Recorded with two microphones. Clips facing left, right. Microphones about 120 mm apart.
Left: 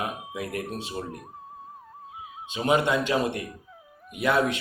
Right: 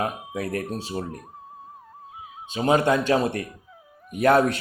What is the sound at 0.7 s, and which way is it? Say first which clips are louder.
Speech: right 3 dB; 30° right (ahead or behind).